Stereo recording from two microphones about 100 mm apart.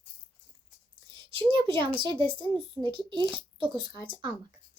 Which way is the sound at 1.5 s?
55° right (ahead or behind).